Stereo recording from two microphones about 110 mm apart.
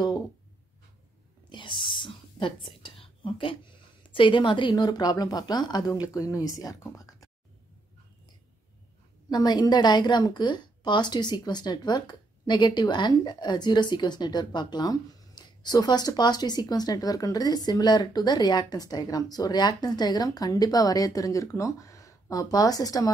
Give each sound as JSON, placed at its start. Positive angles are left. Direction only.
{"t": 1.5, "sound": "a woman's voice", "side_deg": 45}
{"t": 9.3, "sound": "a woman's voice", "side_deg": 40}